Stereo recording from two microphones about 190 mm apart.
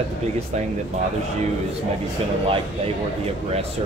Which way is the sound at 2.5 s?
30° right (ahead or behind).